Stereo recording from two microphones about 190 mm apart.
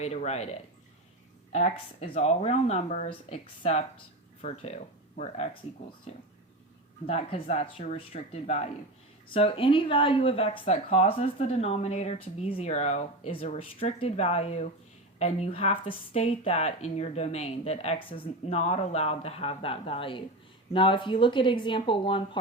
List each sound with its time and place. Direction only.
0.0 s speech: 35° left (ahead or behind)
1.5 s speech: 35° left (ahead or behind)